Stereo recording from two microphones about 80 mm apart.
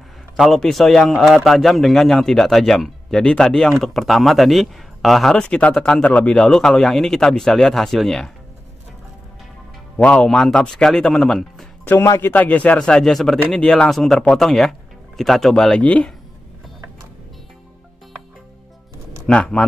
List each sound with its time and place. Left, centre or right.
0.4 s speech: centre
9.9 s a man's voice: centre
11.8 s a man's voice: left; by 15.8 s centre
15.8 s a man's voice: centre
19.2 s a man's voice: centre